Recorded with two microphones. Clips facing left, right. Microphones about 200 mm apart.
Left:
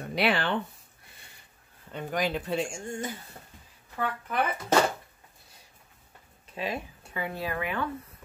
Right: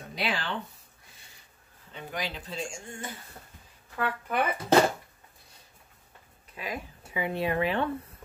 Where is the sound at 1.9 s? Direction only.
50° left (ahead or behind).